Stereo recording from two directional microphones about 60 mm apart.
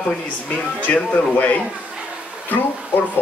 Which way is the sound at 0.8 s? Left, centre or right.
Left.